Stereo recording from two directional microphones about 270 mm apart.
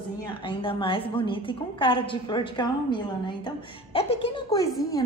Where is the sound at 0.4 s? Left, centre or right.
Centre.